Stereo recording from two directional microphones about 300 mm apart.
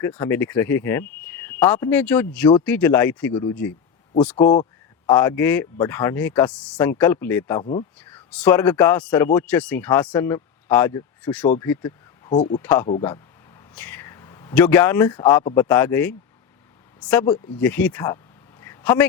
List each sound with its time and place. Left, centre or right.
0.0 s speech: centre
4.4 s speech: centre
7.6 s speech: left
8.0 s speech: centre
11.6 s a sound: centre
12.4 s speech: centre
18.6 s a sound: centre